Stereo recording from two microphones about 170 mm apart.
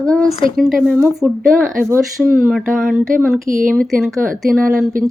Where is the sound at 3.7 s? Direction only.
Centre (ahead or behind).